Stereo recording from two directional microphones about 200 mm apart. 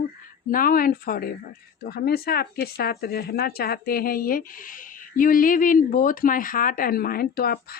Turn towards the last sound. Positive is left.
turn(degrees=50)  # may be behind; listen again after turning